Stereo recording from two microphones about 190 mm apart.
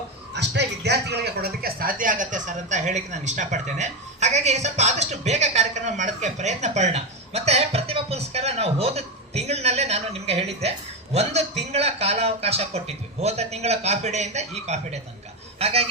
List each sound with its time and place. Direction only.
0.3 s a man's voice: 65° right (ahead or behind); by 15.9 s 30° right (ahead or behind)